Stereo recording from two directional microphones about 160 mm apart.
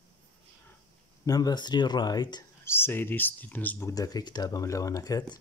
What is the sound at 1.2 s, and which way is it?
Speech, 25° left (ahead or behind).